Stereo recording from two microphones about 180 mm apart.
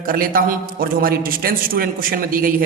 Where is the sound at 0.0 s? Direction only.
50° right (ahead or behind).